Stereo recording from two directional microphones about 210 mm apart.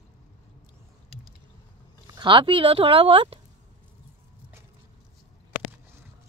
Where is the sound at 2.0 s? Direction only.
20° right (ahead or behind).